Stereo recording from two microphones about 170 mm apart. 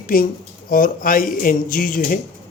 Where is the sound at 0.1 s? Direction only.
55° left (ahead or behind).